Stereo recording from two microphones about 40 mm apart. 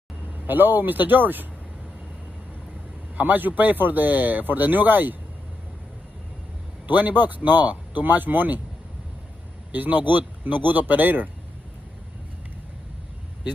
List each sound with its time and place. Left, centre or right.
0.5 s speech: right
3.2 s speech: right
6.9 s speech: right
9.7 s speech: right